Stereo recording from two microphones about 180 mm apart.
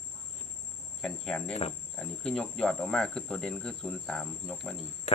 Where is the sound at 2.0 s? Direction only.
5° left (ahead or behind).